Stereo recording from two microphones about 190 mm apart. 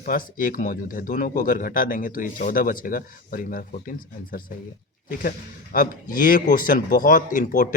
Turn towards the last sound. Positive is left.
turn(degrees=45)  # may be behind; listen again after turning